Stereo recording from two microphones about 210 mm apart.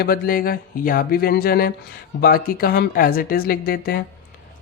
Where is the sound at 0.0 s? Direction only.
45° left (ahead or behind).